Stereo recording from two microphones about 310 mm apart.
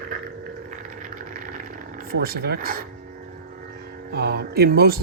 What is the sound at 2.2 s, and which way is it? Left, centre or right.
Speech, right.